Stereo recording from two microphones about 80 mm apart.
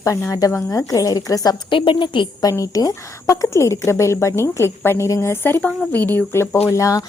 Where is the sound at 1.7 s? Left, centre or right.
Left.